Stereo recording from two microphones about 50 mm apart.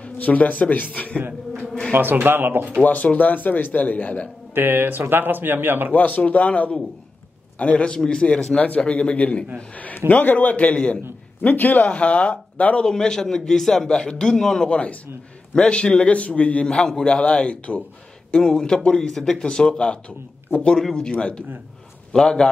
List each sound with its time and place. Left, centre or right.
0.0 s speech: left
1.9 s a man's voice: right
2.8 s speech: left
4.6 s a man's voice: right
5.9 s speech: left
11.4 s speech: left
12.8 s a man's voice: centre
14.7 s speech: left
16.6 s speech: centre
18.3 s a man's voice: centre
21.2 s a man's voice: left